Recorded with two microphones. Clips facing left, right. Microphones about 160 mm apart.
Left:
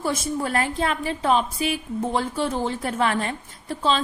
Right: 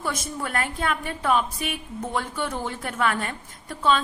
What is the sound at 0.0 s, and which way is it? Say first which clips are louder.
A woman's voice: left 5 dB; 30° left (ahead or behind).